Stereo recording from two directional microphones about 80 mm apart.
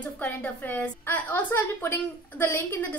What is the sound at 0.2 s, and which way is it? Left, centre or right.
A woman's voice, centre.